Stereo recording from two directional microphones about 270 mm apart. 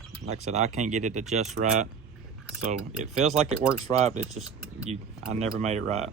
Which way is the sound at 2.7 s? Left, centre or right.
Right.